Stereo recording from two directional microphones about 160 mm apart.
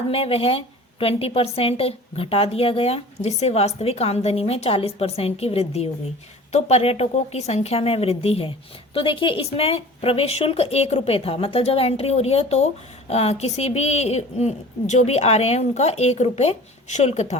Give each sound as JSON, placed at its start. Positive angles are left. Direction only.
{"t": 0.1, "sound": "a woman's voice", "side_deg": 35}